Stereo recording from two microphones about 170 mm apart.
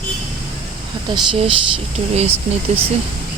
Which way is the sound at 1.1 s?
30° right (ahead or behind).